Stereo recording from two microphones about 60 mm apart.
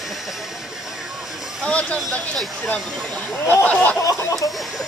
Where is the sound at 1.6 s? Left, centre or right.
Centre.